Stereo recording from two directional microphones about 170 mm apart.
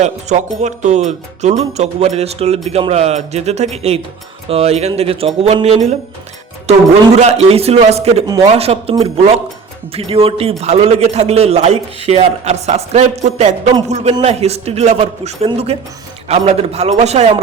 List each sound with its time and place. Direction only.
0.0 s speech: 45° right (ahead or behind)